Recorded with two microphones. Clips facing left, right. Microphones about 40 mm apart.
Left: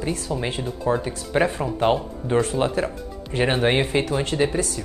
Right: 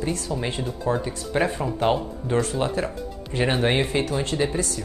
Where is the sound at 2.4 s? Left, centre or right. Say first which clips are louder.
Left 3 dB; left.